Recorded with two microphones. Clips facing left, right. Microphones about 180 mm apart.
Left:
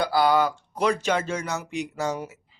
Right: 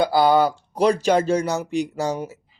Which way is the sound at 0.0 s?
25° right (ahead or behind).